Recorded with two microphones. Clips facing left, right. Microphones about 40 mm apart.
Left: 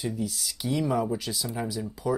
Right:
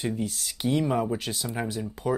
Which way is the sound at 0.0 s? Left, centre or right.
Right.